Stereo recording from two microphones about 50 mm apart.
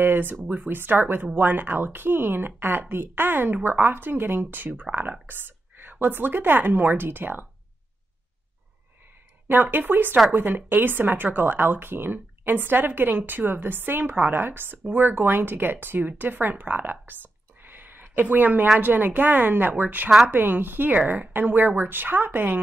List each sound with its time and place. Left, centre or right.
0.0 s a woman's voice: right
9.5 s speech: right
16.1 s a sound: right
18.2 s speech: right